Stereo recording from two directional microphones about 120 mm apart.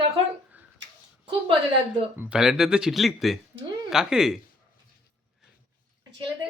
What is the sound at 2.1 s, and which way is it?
Speech, 5° right (ahead or behind).